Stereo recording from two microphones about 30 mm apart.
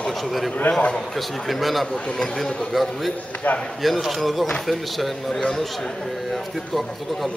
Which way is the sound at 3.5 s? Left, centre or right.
Left.